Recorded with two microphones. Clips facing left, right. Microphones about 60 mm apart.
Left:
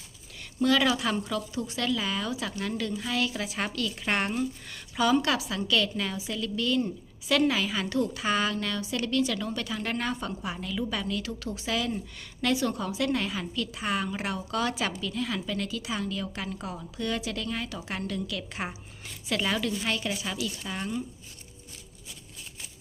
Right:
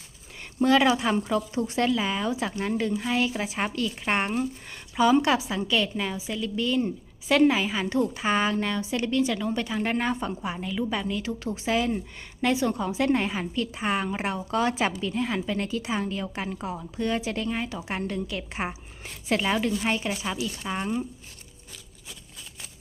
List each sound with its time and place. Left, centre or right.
0.6 s speech: right
2.0 s speech: right
12.9 s speech: right
19.4 s speech: centre